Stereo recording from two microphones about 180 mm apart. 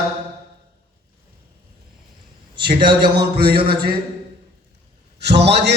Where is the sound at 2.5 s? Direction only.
25° right (ahead or behind).